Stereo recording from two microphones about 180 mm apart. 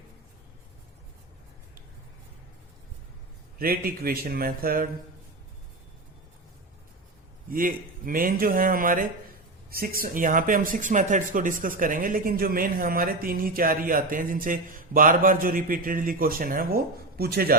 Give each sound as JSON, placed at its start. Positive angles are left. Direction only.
{"t": 3.6, "sound": "a man's voice", "side_deg": -55}
{"t": 7.5, "sound": "speech", "side_deg": -50}